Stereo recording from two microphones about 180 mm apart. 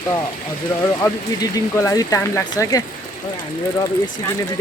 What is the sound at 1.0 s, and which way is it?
Speech, 15° left (ahead or behind).